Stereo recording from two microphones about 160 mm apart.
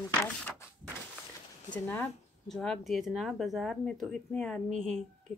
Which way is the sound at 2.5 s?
5° left (ahead or behind).